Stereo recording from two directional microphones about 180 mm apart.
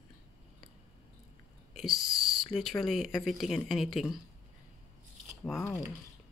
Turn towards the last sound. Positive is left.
turn(degrees=10)  # may be behind; listen again after turning